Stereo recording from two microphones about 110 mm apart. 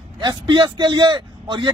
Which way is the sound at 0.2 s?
45° right (ahead or behind).